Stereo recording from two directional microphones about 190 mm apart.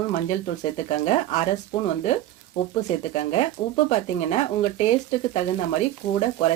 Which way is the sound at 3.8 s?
35° left (ahead or behind).